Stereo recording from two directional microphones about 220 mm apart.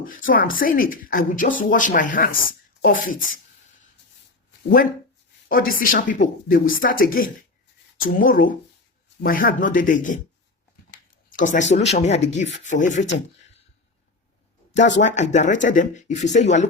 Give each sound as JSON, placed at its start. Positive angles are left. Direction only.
{"t": 0.3, "sound": "speech", "side_deg": 40}
{"t": 5.5, "sound": "speech", "side_deg": 40}
{"t": 11.3, "sound": "speech", "side_deg": 35}
{"t": 15.0, "sound": "speech", "side_deg": 35}